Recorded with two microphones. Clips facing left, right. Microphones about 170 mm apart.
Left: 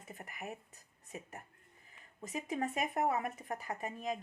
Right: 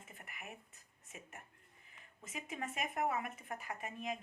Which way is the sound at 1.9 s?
40° left (ahead or behind).